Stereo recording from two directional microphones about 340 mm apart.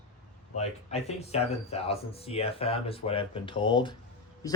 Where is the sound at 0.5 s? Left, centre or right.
Centre.